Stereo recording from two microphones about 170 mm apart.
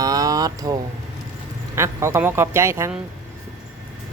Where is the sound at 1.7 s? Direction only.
15° right (ahead or behind).